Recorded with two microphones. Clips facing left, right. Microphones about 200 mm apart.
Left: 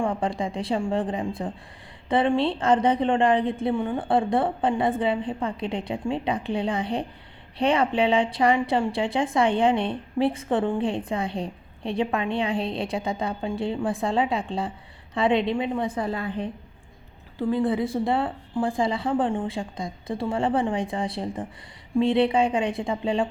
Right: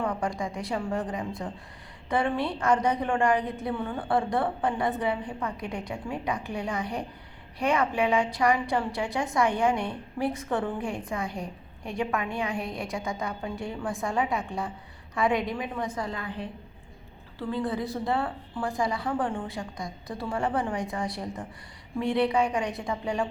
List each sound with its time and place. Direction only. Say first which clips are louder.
0.0 s a woman's voice: left 4 dB; 30° left (ahead or behind)
17.6 s a woman's voice: left 4 dB; 25° left (ahead or behind)